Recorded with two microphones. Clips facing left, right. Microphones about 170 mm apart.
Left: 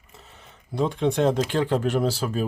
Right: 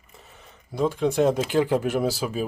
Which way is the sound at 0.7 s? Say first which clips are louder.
Right 1 dB; centre (ahead or behind).